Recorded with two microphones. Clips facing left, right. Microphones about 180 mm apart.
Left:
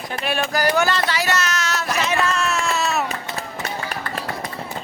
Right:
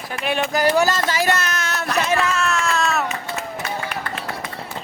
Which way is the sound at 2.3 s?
Centre (ahead or behind).